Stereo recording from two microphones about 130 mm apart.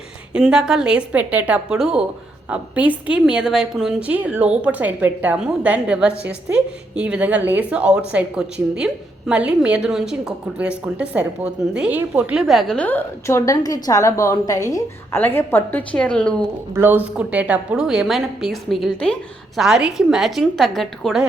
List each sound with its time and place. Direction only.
0.3 s a woman's voice: 5° right (ahead or behind)
16.7 s a woman's voice: 15° right (ahead or behind); by 21.2 s centre (ahead or behind)